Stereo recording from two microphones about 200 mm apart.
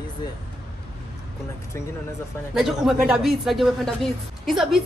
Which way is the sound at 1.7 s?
15° left (ahead or behind).